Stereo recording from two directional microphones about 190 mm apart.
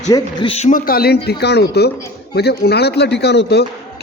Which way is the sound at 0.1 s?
25° left (ahead or behind).